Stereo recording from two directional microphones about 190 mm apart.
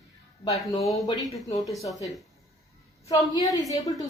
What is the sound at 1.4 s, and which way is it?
Speech, 20° left (ahead or behind).